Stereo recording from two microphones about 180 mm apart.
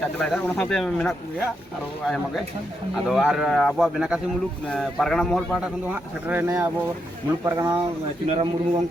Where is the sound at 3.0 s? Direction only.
Centre (ahead or behind).